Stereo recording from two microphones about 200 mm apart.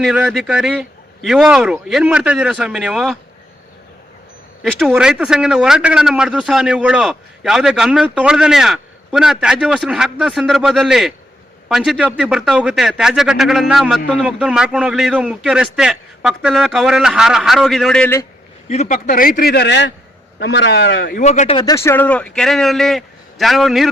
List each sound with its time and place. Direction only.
0.0 s speech: centre (ahead or behind)
4.6 s speech: centre (ahead or behind)
18.7 s speech: 35° left (ahead or behind)
18.9 s a man's voice: 45° left (ahead or behind); by 23.9 s centre (ahead or behind)